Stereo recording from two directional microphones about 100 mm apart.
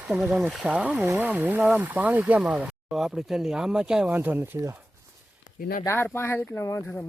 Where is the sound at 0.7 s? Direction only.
15° right (ahead or behind).